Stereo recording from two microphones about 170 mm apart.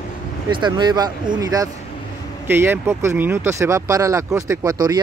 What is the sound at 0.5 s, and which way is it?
Speech, 25° right (ahead or behind).